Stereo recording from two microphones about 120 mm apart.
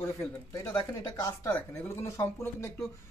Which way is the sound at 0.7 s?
30° left (ahead or behind).